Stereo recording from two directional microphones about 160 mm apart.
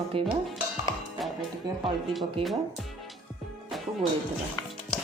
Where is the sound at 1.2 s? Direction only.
Centre (ahead or behind).